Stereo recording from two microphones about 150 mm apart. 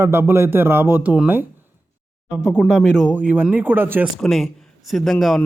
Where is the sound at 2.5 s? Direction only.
Centre (ahead or behind).